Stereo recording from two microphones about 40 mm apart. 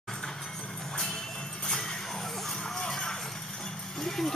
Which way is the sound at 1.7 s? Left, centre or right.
Centre.